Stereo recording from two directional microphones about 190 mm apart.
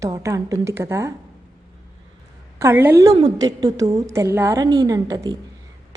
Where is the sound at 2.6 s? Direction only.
10° right (ahead or behind).